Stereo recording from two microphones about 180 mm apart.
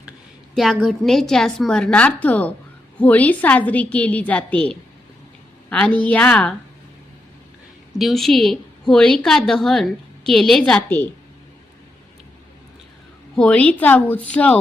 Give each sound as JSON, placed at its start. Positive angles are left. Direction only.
{"t": 0.5, "sound": "a woman's voice", "side_deg": 0}
{"t": 7.9, "sound": "a woman's voice", "side_deg": 0}
{"t": 13.3, "sound": "a woman's voice", "side_deg": 5}